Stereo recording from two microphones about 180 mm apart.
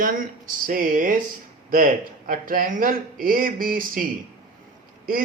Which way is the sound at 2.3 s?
50° right (ahead or behind).